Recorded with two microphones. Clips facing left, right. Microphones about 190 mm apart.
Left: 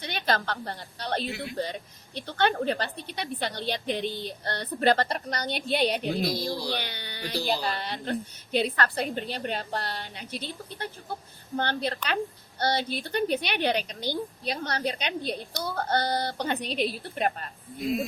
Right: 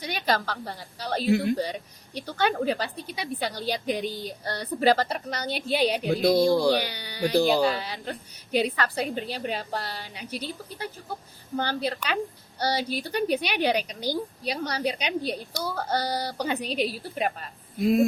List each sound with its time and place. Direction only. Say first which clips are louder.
0.0 s a woman's voice: right 1 dB; 10° right (ahead or behind)
6.2 s speech: right 10 dB; 50° right (ahead or behind)
6.7 s a woman's voice: right 7 dB; 10° right (ahead or behind)